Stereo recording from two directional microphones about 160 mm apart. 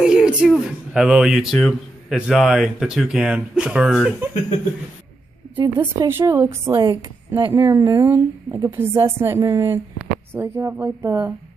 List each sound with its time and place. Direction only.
0.0 s speech: 5° right (ahead or behind)
5.8 s a woman's voice: 15° right (ahead or behind)